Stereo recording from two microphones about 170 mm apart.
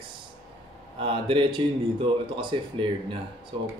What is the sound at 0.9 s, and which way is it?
Speech, 30° right (ahead or behind).